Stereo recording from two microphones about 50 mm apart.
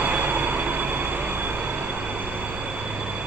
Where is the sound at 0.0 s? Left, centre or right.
Right.